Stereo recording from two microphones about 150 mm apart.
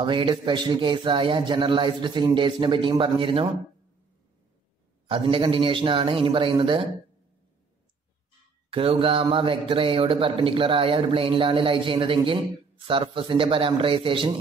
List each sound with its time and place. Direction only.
0.0 s speech: 35° right (ahead or behind)
5.0 s speech: 35° right (ahead or behind)
8.6 s speech: 35° right (ahead or behind)